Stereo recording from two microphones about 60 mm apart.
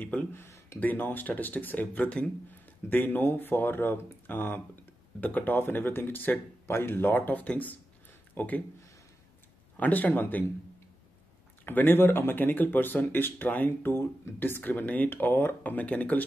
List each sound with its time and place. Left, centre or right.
0.0 s speech: left
0.3 s speech: left
0.7 s speech: left
9.8 s speech: left
11.6 s speech: left